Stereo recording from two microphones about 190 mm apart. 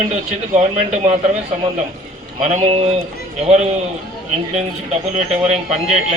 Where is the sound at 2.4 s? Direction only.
35° right (ahead or behind).